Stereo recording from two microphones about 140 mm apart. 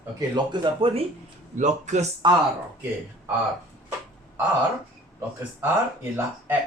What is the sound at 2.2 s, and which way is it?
Speech, 35° right (ahead or behind).